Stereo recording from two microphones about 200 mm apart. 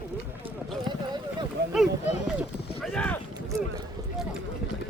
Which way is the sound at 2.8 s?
5° left (ahead or behind).